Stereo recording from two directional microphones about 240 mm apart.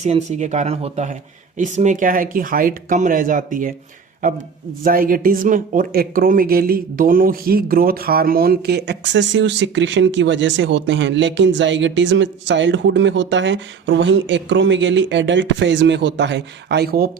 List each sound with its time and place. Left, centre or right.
0.0 s speech: right
4.8 s speech: right